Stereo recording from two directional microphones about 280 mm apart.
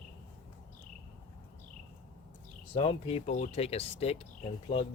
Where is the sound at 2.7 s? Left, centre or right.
Centre.